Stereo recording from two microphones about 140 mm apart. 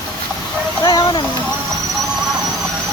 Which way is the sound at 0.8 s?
30° left (ahead or behind).